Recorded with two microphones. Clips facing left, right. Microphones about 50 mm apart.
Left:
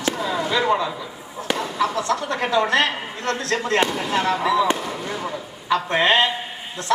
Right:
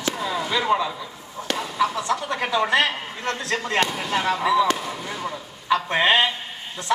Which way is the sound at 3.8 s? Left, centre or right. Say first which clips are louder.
Left 2 dB; centre.